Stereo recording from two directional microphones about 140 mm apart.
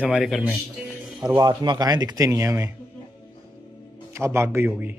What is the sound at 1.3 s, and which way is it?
Speech, 30° right (ahead or behind).